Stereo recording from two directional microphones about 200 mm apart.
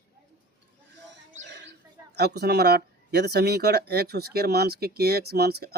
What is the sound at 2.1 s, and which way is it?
Speech, 55° right (ahead or behind).